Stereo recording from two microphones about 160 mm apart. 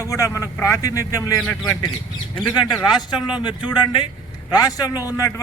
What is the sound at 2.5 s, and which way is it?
A man's voice, 25° left (ahead or behind).